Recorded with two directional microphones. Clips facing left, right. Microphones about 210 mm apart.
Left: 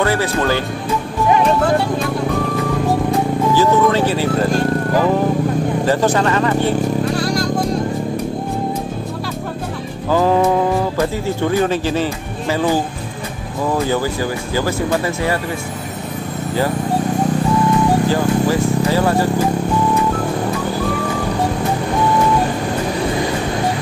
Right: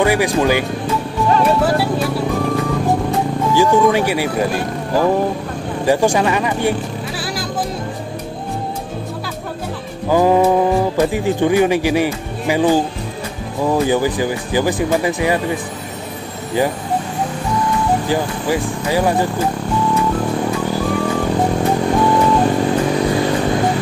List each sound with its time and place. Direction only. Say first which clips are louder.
0.0 s speech: right 2 dB; 15° right (ahead or behind)
3.5 s speech: right 2 dB; 15° right (ahead or behind)
5.9 s speech: right 3 dB; 15° right (ahead or behind)
10.0 s speech: right 2 dB; 15° right (ahead or behind)
13.8 s speech: right 2 dB; 15° right (ahead or behind)
18.0 s speech: left 3 dB; 15° right (ahead or behind)